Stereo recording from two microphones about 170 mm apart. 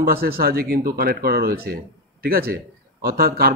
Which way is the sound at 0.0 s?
60° right (ahead or behind).